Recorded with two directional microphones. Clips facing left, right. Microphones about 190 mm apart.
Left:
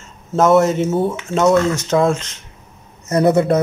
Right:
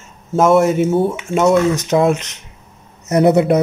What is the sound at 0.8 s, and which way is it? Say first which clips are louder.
Speech: right 2 dB; centre (ahead or behind).